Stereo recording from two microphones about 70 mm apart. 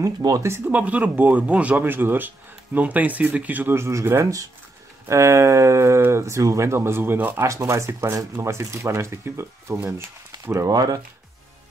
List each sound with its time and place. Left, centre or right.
0.0 s speech: right
0.7 s speech: right
3.7 s speech: right
7.3 s speech: right
10.7 s speech: right